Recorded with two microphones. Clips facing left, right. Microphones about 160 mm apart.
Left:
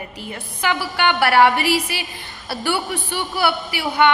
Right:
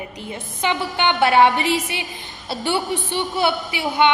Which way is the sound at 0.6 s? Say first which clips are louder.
Even; 25° right (ahead or behind).